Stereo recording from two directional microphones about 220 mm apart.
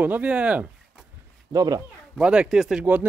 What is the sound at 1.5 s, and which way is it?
Speech, 15° right (ahead or behind).